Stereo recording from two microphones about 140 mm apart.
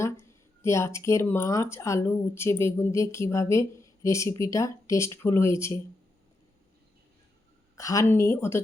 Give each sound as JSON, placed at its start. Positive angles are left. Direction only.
{"t": 0.0, "sound": "speech", "side_deg": 20}
{"t": 7.8, "sound": "speech", "side_deg": 25}